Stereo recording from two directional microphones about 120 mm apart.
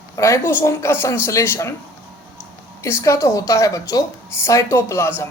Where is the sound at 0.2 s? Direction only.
20° left (ahead or behind).